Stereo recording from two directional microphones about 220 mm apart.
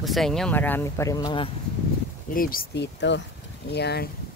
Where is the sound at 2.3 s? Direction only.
40° left (ahead or behind).